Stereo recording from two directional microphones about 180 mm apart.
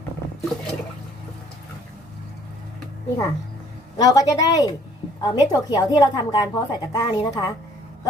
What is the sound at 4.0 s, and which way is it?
A woman's voice, 20° left (ahead or behind).